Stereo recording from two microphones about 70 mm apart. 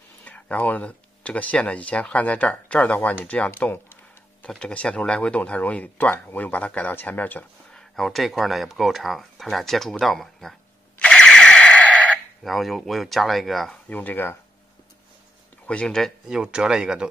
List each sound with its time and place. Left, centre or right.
0.2 s speech: left
3.3 s a sound: centre
4.5 s speech: centre
7.7 s speech: centre
11.0 s a sound: centre
12.4 s speech: centre
13.8 s speech: left
15.6 s speech: centre
16.3 s speech: centre